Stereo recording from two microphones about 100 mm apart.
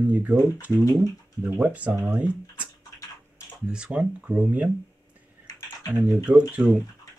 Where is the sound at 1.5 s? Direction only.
15° right (ahead or behind).